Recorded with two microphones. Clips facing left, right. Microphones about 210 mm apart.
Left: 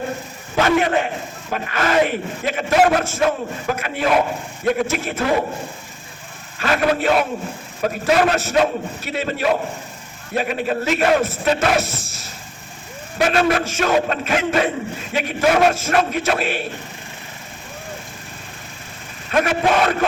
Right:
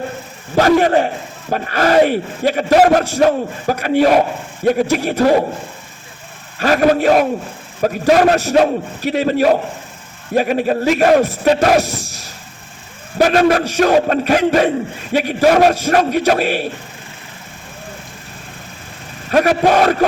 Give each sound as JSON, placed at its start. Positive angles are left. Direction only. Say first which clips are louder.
{"t": 0.5, "sound": "a man's voice", "louder": "right 5 dB", "side_deg": -40}
{"t": 6.6, "sound": "a man's voice", "louder": "right 6 dB", "side_deg": -40}
{"t": 13.1, "sound": "a man's voice", "louder": "right 5 dB", "side_deg": -40}
{"t": 19.3, "sound": "a man's voice", "louder": "right 5 dB", "side_deg": -40}